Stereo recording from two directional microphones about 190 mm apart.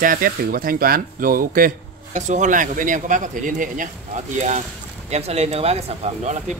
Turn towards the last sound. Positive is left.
turn(degrees=-35)  # may be behind; listen again after turning